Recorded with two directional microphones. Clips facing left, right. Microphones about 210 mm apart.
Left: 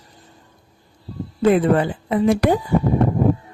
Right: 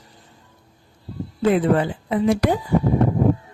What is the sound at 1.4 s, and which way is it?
A woman's voice, 50° left (ahead or behind).